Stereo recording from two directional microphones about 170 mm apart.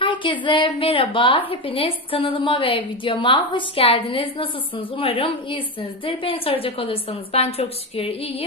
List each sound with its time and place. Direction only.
0.0 s a woman's voice: 30° left (ahead or behind)